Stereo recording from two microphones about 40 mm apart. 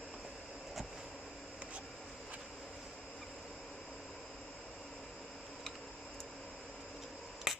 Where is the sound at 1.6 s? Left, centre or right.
Right.